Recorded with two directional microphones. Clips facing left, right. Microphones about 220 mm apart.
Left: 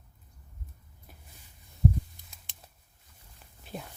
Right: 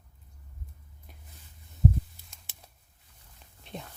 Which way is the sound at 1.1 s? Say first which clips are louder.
Left 1 dB; 5° left (ahead or behind).